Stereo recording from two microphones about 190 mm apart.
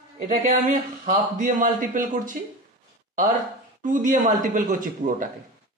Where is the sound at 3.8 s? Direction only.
45° right (ahead or behind).